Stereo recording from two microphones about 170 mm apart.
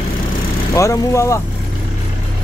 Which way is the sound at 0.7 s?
20° left (ahead or behind).